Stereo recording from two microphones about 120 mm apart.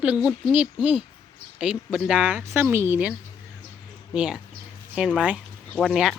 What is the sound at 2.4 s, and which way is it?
Speech, 20° right (ahead or behind).